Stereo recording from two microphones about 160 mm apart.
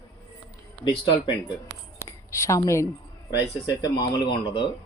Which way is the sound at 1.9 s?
20° left (ahead or behind).